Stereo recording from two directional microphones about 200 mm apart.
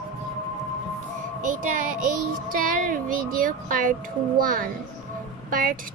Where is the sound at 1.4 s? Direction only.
40° right (ahead or behind).